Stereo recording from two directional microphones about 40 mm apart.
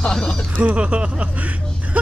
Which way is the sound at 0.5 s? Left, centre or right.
Right.